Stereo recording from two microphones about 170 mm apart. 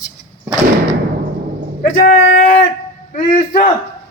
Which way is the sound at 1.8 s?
60° left (ahead or behind).